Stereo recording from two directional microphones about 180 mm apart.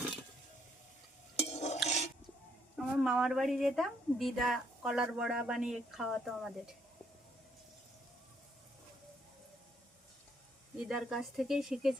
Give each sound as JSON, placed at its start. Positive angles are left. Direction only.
{"t": 1.4, "sound": "stir", "side_deg": 40}
{"t": 2.7, "sound": "a woman's voice", "side_deg": 0}
{"t": 10.8, "sound": "a woman's voice", "side_deg": 0}